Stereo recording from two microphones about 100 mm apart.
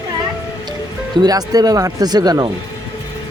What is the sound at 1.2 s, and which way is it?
Speech, 40° right (ahead or behind).